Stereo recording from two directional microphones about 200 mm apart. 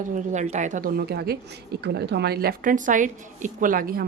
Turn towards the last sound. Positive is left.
turn(degrees=-45)  # may be behind; listen again after turning